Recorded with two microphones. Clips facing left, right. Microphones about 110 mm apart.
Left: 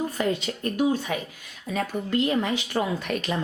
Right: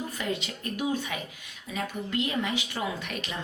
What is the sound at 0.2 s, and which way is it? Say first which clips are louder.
Speech: left 5 dB; 40° left (ahead or behind).